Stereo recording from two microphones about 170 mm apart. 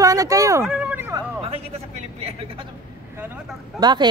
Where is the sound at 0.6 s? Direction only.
5° right (ahead or behind).